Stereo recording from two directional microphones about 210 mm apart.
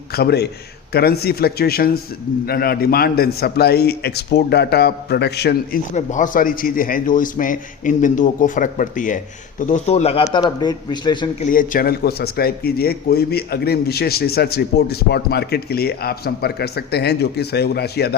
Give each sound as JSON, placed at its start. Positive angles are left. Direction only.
{"t": 0.1, "sound": "a man's voice", "side_deg": 50}
{"t": 5.9, "sound": "a man's voice", "side_deg": 35}
{"t": 11.5, "sound": "a man's voice", "side_deg": 40}